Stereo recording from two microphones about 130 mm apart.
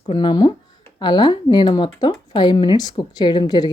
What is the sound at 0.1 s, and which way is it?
Speech, 35° left (ahead or behind).